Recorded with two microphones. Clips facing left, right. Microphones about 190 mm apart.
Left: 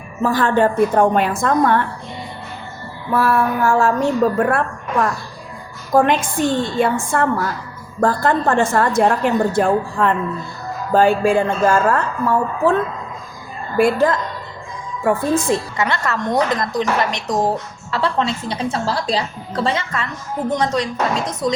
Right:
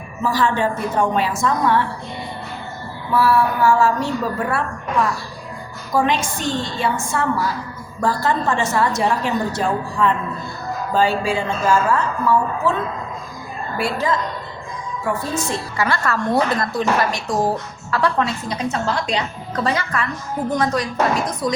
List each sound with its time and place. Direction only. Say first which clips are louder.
0.2 s a woman's voice: left 4 dB; 55° left (ahead or behind)
3.1 s a woman's voice: even; 50° left (ahead or behind)
5.9 s a woman's voice: left 4 dB; 50° left (ahead or behind)
13.7 s a woman's voice: left 6 dB; 55° left (ahead or behind)
15.8 s a woman's voice: even; 20° left (ahead or behind)